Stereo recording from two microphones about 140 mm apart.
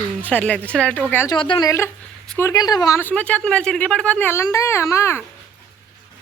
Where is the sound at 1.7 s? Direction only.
20° left (ahead or behind).